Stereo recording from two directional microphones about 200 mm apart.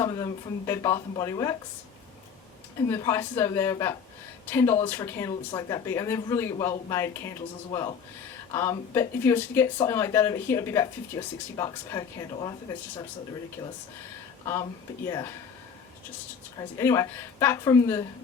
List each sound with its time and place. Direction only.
0.0 s speech: 20° left (ahead or behind)
2.9 s speech: 15° left (ahead or behind)
13.6 s speech: 25° left (ahead or behind)
16.6 s speech: 15° left (ahead or behind)